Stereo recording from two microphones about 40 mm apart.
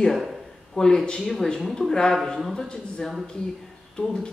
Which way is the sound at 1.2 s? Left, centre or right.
Centre.